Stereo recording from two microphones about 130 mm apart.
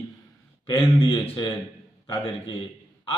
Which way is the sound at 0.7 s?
35° left (ahead or behind).